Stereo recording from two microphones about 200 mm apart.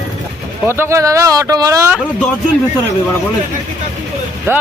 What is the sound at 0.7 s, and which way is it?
Speech, 15° right (ahead or behind).